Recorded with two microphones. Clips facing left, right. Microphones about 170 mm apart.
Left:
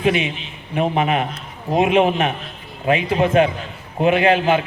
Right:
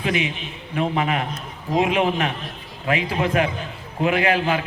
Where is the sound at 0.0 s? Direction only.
20° left (ahead or behind).